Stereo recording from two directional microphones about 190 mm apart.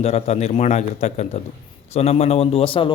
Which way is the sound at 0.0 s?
35° left (ahead or behind).